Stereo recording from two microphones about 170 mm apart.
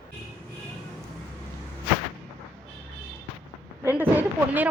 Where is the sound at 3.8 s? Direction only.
10° right (ahead or behind).